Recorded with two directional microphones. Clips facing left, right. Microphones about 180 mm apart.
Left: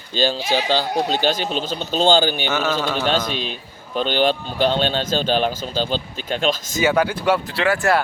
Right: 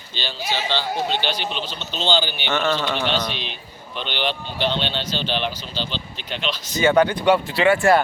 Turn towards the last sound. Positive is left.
turn(degrees=0)  # may be behind; listen again after turning